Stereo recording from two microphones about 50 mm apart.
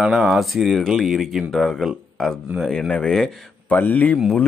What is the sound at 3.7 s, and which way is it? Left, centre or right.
Speech, left.